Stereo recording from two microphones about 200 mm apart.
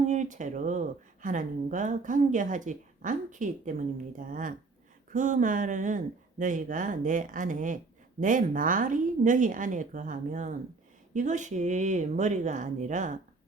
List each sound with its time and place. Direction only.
0.0 s a woman's voice: 35° right (ahead or behind)